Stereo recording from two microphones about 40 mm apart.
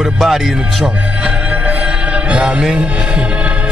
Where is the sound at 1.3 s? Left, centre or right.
Right.